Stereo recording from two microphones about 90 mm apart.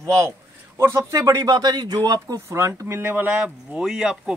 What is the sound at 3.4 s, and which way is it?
Speech, 10° right (ahead or behind).